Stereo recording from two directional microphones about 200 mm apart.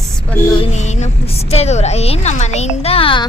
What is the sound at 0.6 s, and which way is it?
A woman's voice, 35° left (ahead or behind).